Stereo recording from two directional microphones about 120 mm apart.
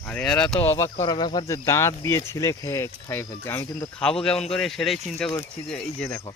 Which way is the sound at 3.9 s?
5° left (ahead or behind).